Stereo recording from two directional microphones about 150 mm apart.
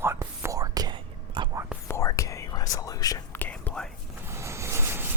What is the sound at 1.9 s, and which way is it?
Whispering, 20° left (ahead or behind).